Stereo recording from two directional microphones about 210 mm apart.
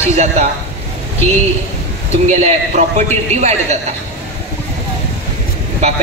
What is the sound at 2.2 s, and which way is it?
A man's voice, 35° right (ahead or behind).